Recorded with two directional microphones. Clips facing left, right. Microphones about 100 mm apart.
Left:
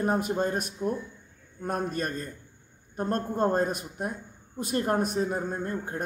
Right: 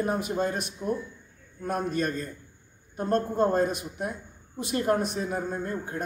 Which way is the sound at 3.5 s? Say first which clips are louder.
Right 1 dB; 45° left (ahead or behind).